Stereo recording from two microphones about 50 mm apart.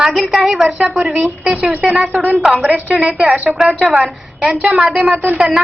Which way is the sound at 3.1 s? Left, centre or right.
Right.